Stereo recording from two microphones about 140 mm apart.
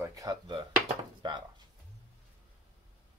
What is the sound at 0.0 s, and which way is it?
Speech, 25° right (ahead or behind).